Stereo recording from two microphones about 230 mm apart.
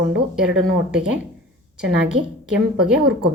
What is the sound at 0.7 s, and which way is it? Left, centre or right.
Speech, centre.